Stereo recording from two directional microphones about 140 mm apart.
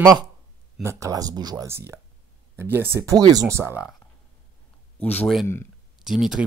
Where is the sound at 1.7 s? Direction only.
15° right (ahead or behind).